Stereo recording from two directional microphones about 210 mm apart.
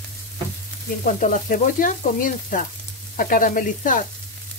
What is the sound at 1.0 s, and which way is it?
Frying, 40° left (ahead or behind).